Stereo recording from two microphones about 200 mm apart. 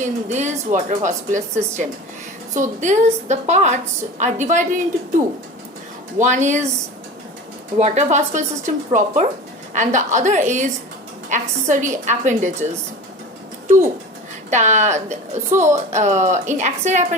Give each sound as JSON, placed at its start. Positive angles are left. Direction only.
{"t": 0.0, "sound": "a woman's voice", "side_deg": -35}
{"t": 2.6, "sound": "a woman's voice", "side_deg": -35}
{"t": 6.1, "sound": "a woman's voice", "side_deg": -35}
{"t": 7.8, "sound": "a woman's voice", "side_deg": -35}
{"t": 14.5, "sound": "a woman's voice", "side_deg": -35}